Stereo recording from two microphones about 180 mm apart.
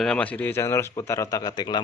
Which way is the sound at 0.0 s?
5° left (ahead or behind).